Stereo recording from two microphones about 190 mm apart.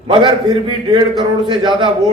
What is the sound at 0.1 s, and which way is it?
A man's voice, 25° right (ahead or behind).